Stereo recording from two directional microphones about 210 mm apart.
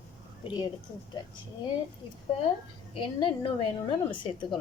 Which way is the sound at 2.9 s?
25° left (ahead or behind).